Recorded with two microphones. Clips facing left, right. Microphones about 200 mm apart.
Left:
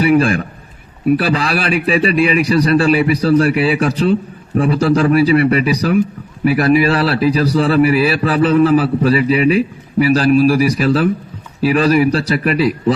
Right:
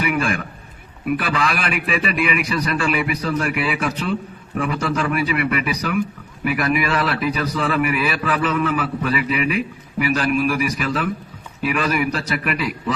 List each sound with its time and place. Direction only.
0.0 s a man's voice: 30° left (ahead or behind)